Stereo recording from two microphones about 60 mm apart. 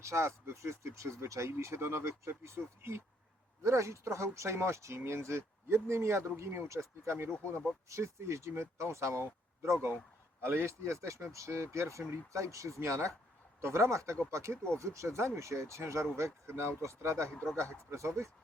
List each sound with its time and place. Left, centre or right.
0.0 s speech: right
10.4 s a man's voice: right
10.7 s speech: right
17.2 s speech: centre
17.6 s speech: right